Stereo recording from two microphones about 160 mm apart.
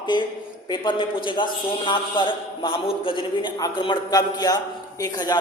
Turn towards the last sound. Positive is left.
turn(degrees=25)  # may be behind; listen again after turning